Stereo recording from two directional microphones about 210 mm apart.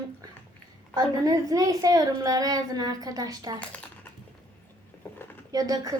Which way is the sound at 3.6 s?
5° left (ahead or behind).